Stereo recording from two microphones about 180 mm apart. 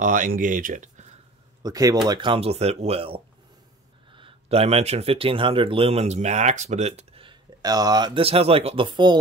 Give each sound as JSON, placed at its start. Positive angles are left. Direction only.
{"t": 0.0, "sound": "speech", "side_deg": -50}
{"t": 1.6, "sound": "speech", "side_deg": -20}